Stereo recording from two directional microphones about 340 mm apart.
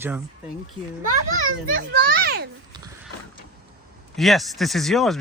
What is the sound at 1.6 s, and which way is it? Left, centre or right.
Speech, right.